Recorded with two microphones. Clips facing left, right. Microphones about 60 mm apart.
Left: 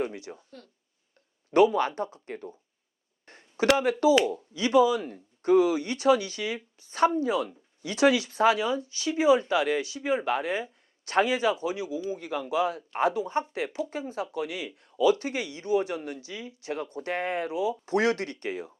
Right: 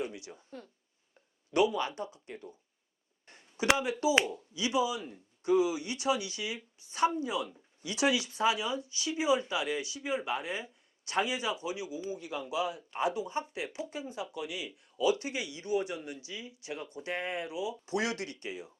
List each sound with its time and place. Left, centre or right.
0.0 s speech: left
0.5 s speech: centre
1.5 s speech: left
3.2 s a sound: left
4.2 s speech: left